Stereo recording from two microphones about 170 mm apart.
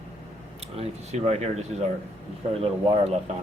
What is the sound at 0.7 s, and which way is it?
Speech, 40° right (ahead or behind).